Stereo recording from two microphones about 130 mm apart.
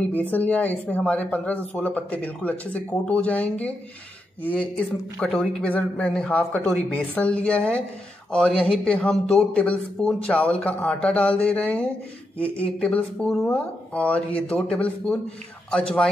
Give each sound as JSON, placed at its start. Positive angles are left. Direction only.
{"t": 0.1, "sound": "speech", "side_deg": 15}